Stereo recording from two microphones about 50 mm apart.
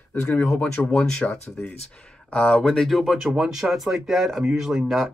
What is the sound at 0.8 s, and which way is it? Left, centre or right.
Speech, centre.